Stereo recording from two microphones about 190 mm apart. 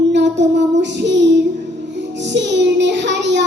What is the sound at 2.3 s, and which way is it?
Child singing, 70° right (ahead or behind).